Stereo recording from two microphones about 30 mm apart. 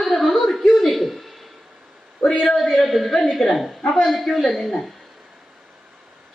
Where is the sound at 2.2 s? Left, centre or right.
Left.